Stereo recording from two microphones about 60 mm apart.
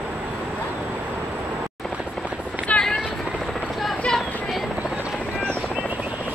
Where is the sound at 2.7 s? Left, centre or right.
Left.